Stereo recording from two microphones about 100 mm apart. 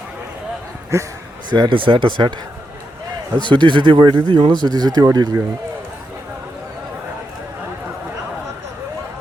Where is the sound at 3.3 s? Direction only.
50° right (ahead or behind).